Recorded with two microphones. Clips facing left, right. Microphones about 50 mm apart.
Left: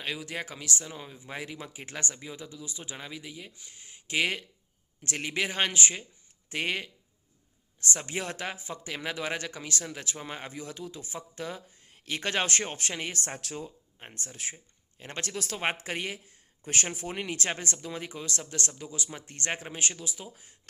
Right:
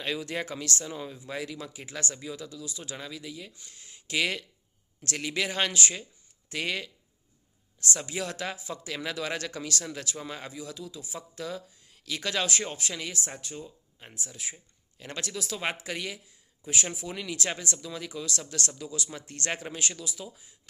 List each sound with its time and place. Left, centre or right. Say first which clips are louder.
0.0 s speech: right 3 dB; centre
1.3 s speech: right 1 dB; left
13.4 s speech: left 2 dB; left
14.3 s speech: left 2 dB; left
14.5 s speech: even; left
19.7 s speech: even; left
20.3 s speech: left 1 dB; left